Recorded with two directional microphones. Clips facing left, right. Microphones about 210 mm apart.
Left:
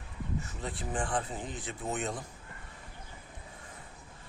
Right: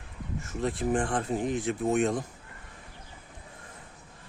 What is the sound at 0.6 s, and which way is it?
Speech, 65° right (ahead or behind).